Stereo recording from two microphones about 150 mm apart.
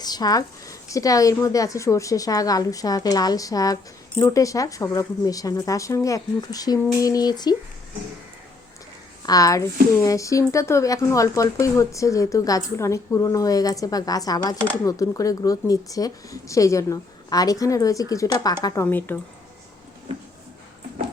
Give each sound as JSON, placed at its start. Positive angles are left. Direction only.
{"t": 0.0, "sound": "speech", "side_deg": 25}
{"t": 9.2, "sound": "speech", "side_deg": 25}